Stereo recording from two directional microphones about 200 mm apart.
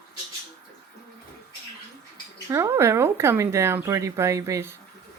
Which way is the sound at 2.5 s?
15° right (ahead or behind).